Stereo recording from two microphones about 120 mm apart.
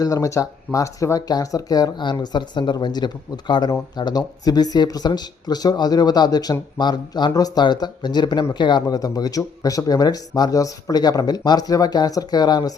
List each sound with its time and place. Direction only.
0.0 s speech: 25° left (ahead or behind)